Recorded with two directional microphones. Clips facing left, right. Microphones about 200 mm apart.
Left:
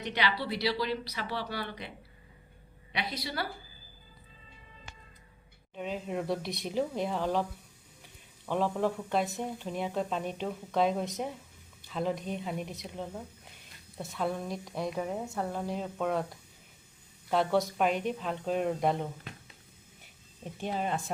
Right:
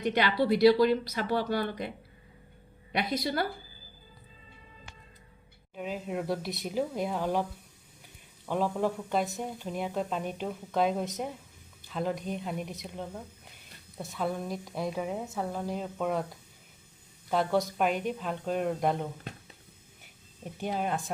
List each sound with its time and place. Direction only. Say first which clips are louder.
0.0 s speech: right 6 dB; 50° right (ahead or behind)
2.9 s speech: right 6 dB; 45° right (ahead or behind)
5.7 s speech: even; 5° right (ahead or behind)
8.4 s speech: even; 5° right (ahead or behind)
17.2 s speech: even; centre (ahead or behind)
20.4 s speech: right 1 dB; 5° right (ahead or behind)